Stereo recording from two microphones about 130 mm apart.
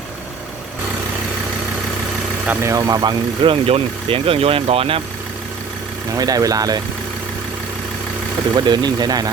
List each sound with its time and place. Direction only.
2.6 s speech: 30° right (ahead or behind); by 5.0 s 45° right (ahead or behind)
6.1 s speech: 30° right (ahead or behind)
8.5 s speech: 35° right (ahead or behind)